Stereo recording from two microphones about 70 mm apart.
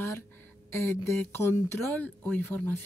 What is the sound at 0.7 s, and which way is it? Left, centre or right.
Speech, left.